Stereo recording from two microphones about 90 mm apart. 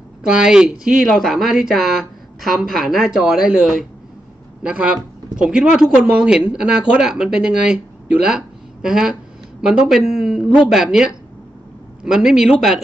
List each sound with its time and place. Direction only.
0.3 s speech: 10° right (ahead or behind)